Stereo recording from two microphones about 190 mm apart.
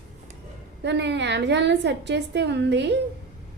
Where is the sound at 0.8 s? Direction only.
65° right (ahead or behind).